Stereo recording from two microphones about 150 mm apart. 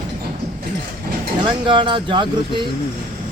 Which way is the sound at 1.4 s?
35° right (ahead or behind).